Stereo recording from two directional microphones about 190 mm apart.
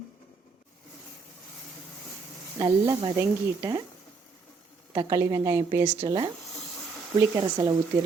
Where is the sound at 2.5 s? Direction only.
25° right (ahead or behind).